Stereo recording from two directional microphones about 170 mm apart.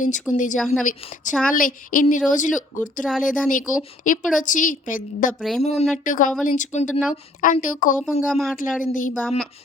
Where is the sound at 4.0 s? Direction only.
50° left (ahead or behind).